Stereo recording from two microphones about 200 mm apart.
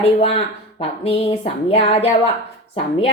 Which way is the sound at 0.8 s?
30° left (ahead or behind).